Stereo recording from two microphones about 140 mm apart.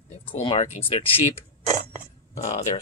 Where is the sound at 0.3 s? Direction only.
40° left (ahead or behind).